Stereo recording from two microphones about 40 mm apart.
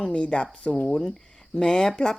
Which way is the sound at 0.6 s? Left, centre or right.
Left.